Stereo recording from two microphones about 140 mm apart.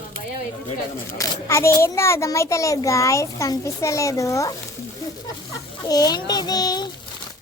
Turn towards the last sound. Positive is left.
turn(degrees=30)  # may be behind; listen again after turning